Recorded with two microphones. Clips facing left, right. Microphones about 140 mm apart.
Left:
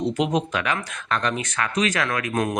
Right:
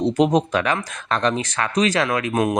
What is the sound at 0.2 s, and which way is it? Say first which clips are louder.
Speech: right 5 dB; 40° right (ahead or behind).